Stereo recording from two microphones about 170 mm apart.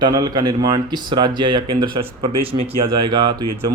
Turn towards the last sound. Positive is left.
turn(degrees=-25)  # may be behind; listen again after turning